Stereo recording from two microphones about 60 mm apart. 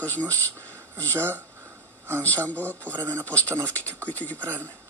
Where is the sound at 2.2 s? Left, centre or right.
Left.